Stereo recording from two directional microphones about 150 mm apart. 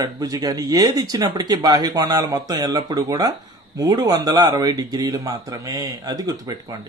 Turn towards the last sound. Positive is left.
turn(degrees=-25)  # may be behind; listen again after turning